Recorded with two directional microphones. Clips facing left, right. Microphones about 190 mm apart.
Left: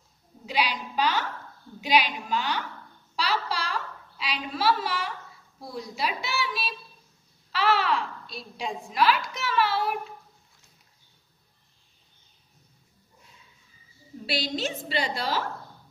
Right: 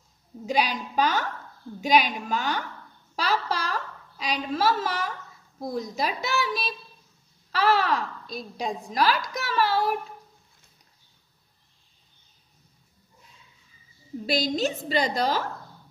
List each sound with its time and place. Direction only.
0.5 s a woman's voice: 45° right (ahead or behind)
3.2 s a sound: 45° right (ahead or behind)
5.6 s a woman's voice: 45° right (ahead or behind)
14.2 s a woman's voice: 40° right (ahead or behind)